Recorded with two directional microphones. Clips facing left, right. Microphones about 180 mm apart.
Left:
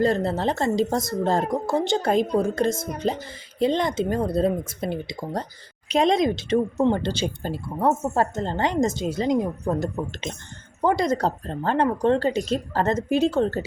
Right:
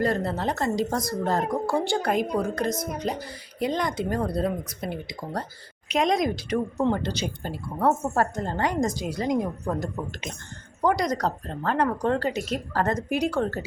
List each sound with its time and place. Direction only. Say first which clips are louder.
0.0 s speech: left 4 dB; 25° left (ahead or behind)
7.8 s speech: left 1 dB; 20° left (ahead or behind)